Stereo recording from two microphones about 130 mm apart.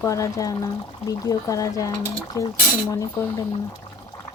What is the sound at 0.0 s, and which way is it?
Speech, 25° left (ahead or behind).